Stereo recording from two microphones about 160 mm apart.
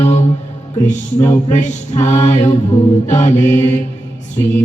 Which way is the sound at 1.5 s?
45° left (ahead or behind).